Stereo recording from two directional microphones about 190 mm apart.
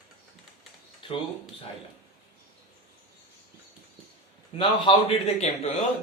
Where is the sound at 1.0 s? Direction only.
25° left (ahead or behind).